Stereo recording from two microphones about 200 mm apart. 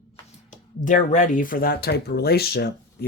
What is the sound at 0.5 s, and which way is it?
Speech, 40° left (ahead or behind).